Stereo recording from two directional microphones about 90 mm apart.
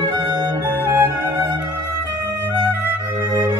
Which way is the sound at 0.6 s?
30° right (ahead or behind).